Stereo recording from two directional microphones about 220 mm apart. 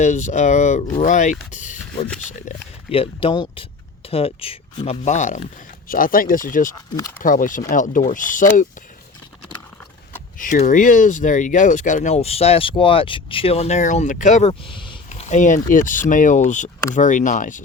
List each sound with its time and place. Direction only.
0.0 s speech: 35° left (ahead or behind)
6.9 s speech: 15° left (ahead or behind)
7.2 s speech: 35° left (ahead or behind)
10.3 s speech: 35° left (ahead or behind)